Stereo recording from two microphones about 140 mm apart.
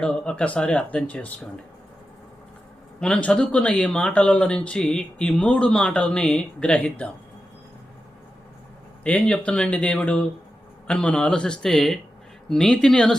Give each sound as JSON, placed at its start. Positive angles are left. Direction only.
{"t": 0.0, "sound": "speech", "side_deg": 5}
{"t": 3.0, "sound": "speech", "side_deg": 10}
{"t": 9.0, "sound": "speech", "side_deg": 10}